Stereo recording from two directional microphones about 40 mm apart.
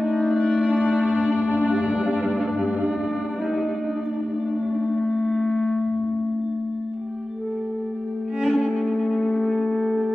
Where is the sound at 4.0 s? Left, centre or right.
Right.